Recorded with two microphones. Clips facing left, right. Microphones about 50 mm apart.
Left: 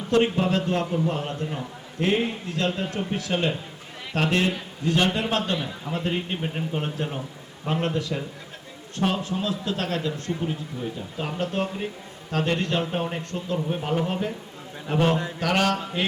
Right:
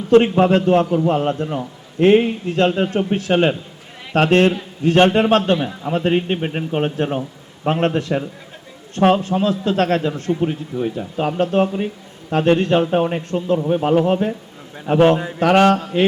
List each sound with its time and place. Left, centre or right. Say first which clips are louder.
0.1 s a man's voice: right 9 dB; right